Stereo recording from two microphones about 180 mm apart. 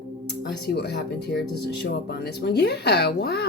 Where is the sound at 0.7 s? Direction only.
65° left (ahead or behind).